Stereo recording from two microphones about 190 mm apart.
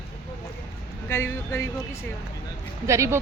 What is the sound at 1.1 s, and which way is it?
Speech, 15° left (ahead or behind).